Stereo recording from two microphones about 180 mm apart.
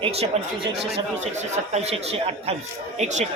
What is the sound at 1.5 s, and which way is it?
Speech, 35° right (ahead or behind).